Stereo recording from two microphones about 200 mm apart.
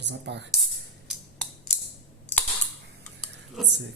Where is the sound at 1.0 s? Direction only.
Centre (ahead or behind).